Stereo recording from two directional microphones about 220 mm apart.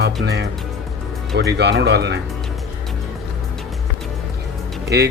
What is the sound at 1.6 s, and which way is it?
Speech, 50° right (ahead or behind).